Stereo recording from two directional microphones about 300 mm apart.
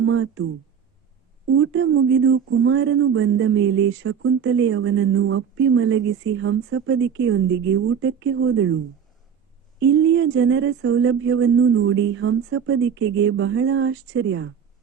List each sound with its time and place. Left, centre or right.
0.0 s speech: right
9.8 s speech: right